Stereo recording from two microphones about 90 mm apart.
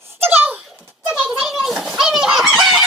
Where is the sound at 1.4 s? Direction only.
Centre (ahead or behind).